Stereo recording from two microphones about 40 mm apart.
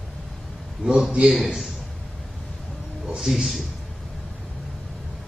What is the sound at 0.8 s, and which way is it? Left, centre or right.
Speech, right.